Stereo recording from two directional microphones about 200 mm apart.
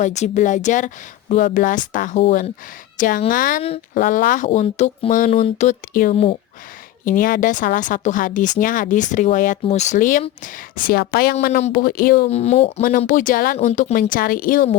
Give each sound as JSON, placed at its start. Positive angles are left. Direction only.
{"t": 0.0, "sound": "speech", "side_deg": 35}
{"t": 11.3, "sound": "speech", "side_deg": 35}
{"t": 12.3, "sound": "speech", "side_deg": 35}